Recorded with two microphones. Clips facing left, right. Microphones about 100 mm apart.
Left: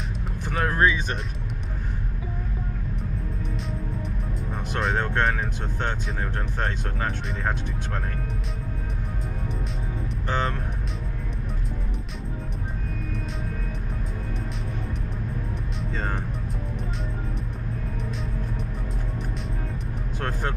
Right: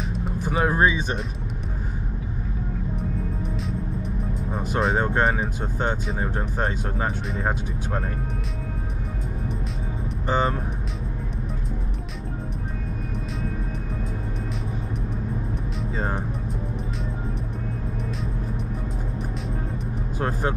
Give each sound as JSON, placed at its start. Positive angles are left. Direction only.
{"t": 0.1, "sound": "speech", "side_deg": 0}
{"t": 4.6, "sound": "speech", "side_deg": -5}
{"t": 10.2, "sound": "speech", "side_deg": -10}
{"t": 16.0, "sound": "speech", "side_deg": -10}
{"t": 20.2, "sound": "speech", "side_deg": -10}